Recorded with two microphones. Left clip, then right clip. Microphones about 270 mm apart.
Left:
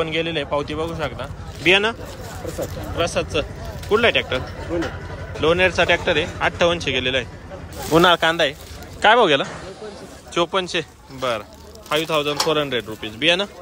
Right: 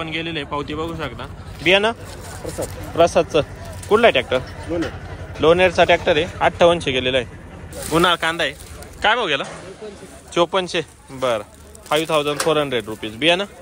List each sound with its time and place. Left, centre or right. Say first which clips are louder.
0.0 s a man's voice: left 3 dB; centre
3.0 s speech: right 7 dB; centre
4.7 s a sound: right 1 dB; left
5.4 s speech: right 3 dB; centre
7.9 s a man's voice: left 2 dB; centre